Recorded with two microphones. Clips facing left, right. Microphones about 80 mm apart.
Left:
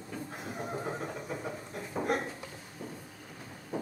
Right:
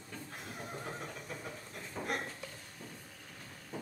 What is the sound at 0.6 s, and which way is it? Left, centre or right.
Neigh, left.